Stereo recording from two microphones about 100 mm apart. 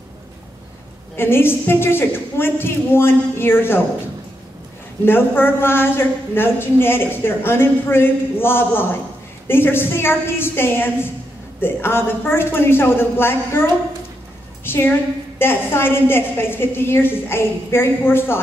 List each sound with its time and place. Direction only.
1.1 s a woman's voice: 25° left (ahead or behind)
5.0 s a woman's voice: 20° left (ahead or behind)